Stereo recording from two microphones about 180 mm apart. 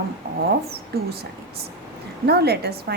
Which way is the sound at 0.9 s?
60° right (ahead or behind).